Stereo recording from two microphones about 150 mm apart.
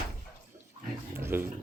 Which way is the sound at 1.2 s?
15° right (ahead or behind).